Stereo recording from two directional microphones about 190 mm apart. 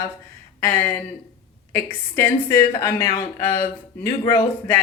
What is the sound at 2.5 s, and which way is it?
Speech, 15° left (ahead or behind).